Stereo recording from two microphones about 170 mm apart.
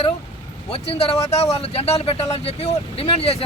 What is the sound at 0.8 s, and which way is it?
Speech, 35° left (ahead or behind).